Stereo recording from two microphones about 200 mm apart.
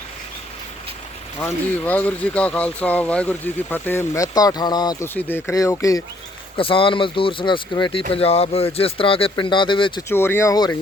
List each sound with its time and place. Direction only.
1.4 s speech: 5° left (ahead or behind)
6.6 s speech: 25° left (ahead or behind)
10.1 s speech: 10° left (ahead or behind)